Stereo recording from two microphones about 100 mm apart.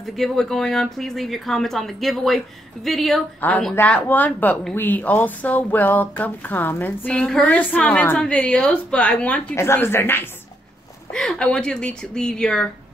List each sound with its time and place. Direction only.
0.0 s speech: centre (ahead or behind)
3.3 s speech: 15° left (ahead or behind)
11.1 s speech: 5° left (ahead or behind)